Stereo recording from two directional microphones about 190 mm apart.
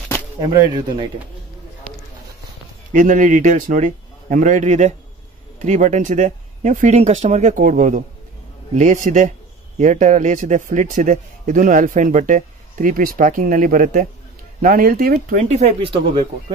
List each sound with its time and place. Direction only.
0.4 s speech: 20° right (ahead or behind)
2.9 s a man's voice: 45° right (ahead or behind)